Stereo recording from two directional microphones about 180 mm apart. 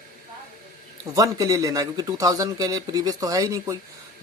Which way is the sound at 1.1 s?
20° right (ahead or behind).